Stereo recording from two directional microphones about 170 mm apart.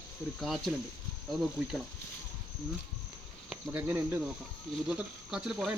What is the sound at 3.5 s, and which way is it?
Speech, 10° right (ahead or behind).